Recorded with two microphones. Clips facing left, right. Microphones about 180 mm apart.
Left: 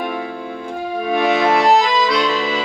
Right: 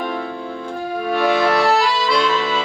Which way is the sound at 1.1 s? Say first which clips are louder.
Left 1 dB; 20° left (ahead or behind).